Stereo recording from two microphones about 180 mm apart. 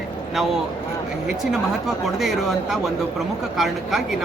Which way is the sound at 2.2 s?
Centre (ahead or behind).